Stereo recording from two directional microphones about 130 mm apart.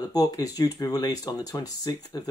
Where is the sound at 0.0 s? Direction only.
30° left (ahead or behind).